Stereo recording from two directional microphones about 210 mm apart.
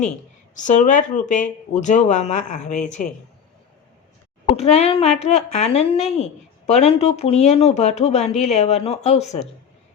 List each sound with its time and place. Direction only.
0.5 s speech: 35° left (ahead or behind)
4.5 s speech: 30° left (ahead or behind)